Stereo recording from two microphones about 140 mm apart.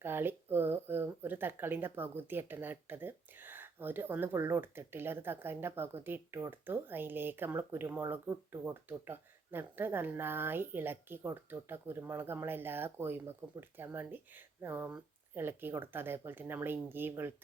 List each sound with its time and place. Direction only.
0.0 s speech: 15° right (ahead or behind)